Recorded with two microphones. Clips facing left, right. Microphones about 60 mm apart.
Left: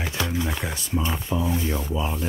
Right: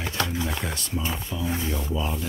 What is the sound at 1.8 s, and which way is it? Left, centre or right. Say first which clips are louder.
Speech: left 1 dB; centre.